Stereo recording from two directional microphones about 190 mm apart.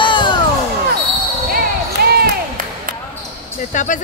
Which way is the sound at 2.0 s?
55° right (ahead or behind).